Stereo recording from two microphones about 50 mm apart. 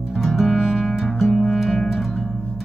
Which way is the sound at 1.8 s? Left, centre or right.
Centre.